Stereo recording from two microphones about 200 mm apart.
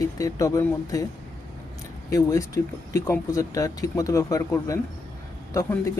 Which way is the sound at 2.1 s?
15° left (ahead or behind).